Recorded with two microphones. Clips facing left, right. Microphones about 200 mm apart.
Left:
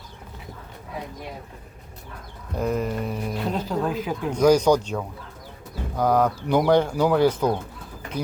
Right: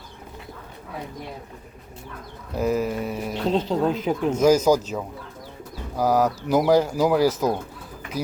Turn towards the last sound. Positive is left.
turn(degrees=-5)  # may be behind; listen again after turning